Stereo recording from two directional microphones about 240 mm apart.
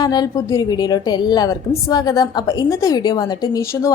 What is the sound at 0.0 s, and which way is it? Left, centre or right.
A woman's voice, centre.